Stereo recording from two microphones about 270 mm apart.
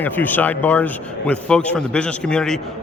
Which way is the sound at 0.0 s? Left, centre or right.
Centre.